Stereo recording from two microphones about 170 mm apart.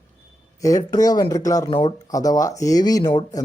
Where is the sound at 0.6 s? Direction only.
20° left (ahead or behind).